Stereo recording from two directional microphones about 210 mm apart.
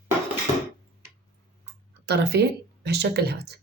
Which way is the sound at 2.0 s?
50° right (ahead or behind).